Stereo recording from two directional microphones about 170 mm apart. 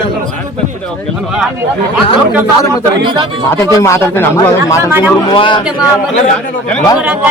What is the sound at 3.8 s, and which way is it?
A man's voice, 15° left (ahead or behind).